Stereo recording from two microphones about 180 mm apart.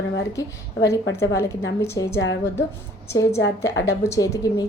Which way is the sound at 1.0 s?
70° left (ahead or behind).